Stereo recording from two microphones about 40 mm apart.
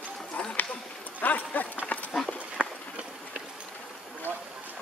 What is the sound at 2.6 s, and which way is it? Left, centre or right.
Run, right.